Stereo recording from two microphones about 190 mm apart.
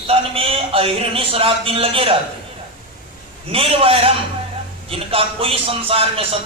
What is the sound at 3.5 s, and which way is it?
A man's voice, 30° right (ahead or behind).